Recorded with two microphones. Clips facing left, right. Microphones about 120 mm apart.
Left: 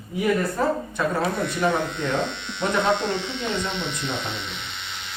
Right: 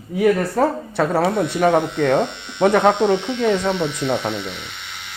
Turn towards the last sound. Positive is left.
turn(degrees=-10)  # may be behind; listen again after turning